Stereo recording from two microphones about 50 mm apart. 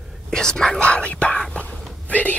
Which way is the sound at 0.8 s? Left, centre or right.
Left.